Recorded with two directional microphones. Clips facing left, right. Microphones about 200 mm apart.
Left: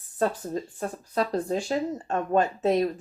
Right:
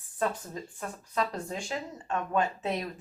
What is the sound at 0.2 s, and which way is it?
Speech, 35° left (ahead or behind).